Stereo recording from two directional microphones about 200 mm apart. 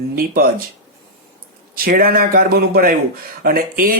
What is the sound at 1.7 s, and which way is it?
Speech, 45° right (ahead or behind).